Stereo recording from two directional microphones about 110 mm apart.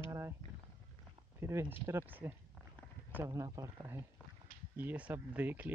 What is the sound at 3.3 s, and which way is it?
Speech, 35° right (ahead or behind).